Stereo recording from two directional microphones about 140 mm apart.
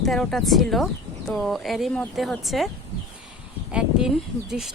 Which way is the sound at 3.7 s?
5° right (ahead or behind).